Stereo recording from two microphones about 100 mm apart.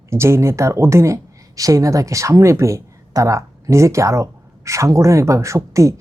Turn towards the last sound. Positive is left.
turn(degrees=-30)  # may be behind; listen again after turning